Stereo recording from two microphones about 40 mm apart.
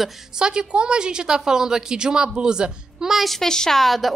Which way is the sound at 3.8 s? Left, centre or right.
Centre.